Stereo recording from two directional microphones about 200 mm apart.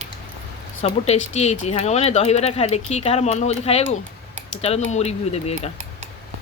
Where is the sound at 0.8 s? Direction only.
35° left (ahead or behind).